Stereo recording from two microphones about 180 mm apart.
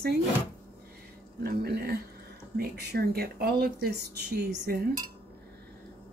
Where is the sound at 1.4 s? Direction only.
60° right (ahead or behind).